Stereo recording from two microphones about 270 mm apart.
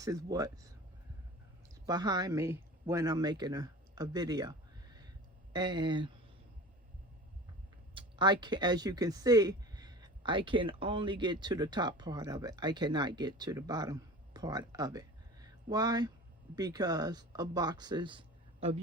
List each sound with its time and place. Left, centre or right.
0.0 s speech: centre
1.9 s speech: centre
5.5 s speech: centre
7.9 s speech: centre